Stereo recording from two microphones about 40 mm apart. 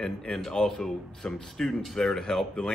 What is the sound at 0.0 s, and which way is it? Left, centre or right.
Speech, centre.